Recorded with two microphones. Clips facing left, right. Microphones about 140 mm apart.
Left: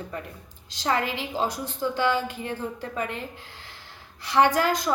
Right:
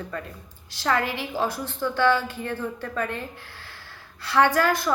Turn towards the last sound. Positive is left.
turn(degrees=15)  # may be behind; listen again after turning